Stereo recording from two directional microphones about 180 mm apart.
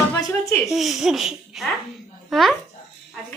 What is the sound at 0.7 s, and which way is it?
Speech, centre (ahead or behind).